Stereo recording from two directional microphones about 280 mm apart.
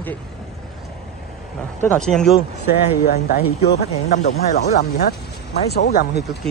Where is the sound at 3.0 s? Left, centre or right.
Left.